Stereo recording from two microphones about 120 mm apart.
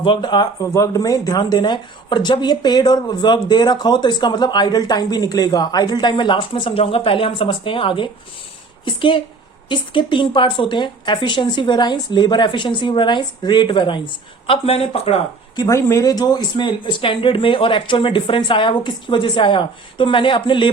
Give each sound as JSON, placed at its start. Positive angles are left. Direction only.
{"t": 0.0, "sound": "speech", "side_deg": 40}
{"t": 0.6, "sound": "a woman's voice", "side_deg": 25}
{"t": 14.4, "sound": "speech", "side_deg": 50}
{"t": 15.5, "sound": "speech", "side_deg": 25}